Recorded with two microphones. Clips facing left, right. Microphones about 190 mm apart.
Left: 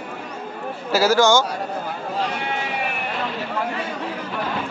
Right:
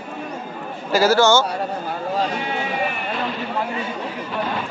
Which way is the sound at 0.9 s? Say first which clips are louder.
Right 1 dB; 10° left (ahead or behind).